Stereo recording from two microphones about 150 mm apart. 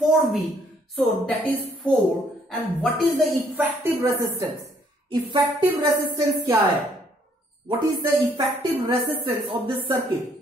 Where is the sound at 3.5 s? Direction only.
20° right (ahead or behind).